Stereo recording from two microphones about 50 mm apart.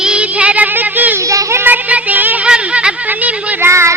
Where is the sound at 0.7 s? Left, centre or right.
Right.